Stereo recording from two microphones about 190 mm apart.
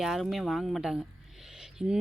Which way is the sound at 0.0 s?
Centre (ahead or behind).